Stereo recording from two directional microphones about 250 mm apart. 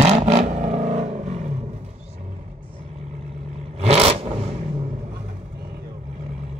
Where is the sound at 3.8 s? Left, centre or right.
Right.